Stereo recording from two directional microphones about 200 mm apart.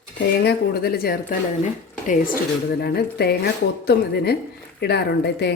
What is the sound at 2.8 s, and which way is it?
A woman's voice, 50° left (ahead or behind).